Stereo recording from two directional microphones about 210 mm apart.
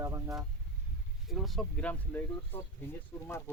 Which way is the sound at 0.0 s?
15° right (ahead or behind).